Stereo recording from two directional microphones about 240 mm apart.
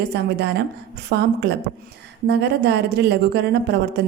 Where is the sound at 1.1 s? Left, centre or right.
Right.